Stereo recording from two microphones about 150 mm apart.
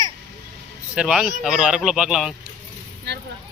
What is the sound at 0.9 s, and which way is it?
Speech, 5° right (ahead or behind).